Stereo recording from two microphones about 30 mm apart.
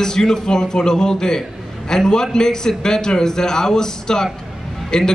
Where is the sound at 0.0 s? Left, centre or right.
Centre.